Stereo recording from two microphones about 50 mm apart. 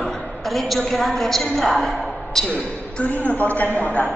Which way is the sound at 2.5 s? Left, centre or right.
Left.